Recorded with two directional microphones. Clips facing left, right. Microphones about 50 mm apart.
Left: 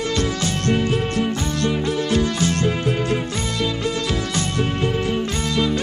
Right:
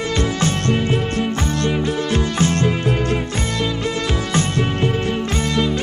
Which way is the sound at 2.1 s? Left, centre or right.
Right.